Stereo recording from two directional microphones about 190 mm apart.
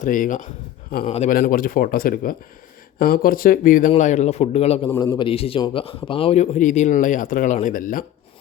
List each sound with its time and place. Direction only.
0.0 s a man's voice: 45° left (ahead or behind)
1.4 s a man's voice: 45° left (ahead or behind); by 4.9 s 30° left (ahead or behind)
4.9 s a man's voice: 15° left (ahead or behind); by 8.0 s 45° left (ahead or behind)